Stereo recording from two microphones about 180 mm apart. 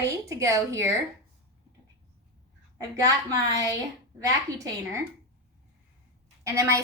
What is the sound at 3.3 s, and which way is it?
Speech, 20° right (ahead or behind).